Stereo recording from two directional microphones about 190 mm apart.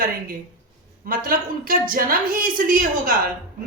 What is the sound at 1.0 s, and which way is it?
A woman's voice, 50° right (ahead or behind).